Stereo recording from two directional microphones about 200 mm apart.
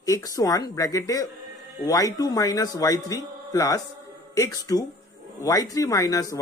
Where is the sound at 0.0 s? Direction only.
15° left (ahead or behind).